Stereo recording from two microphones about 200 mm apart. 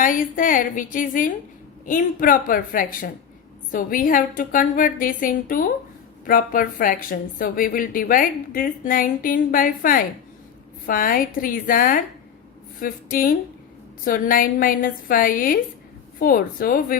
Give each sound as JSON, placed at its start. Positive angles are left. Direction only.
{"t": 0.0, "sound": "a woman's voice", "side_deg": 40}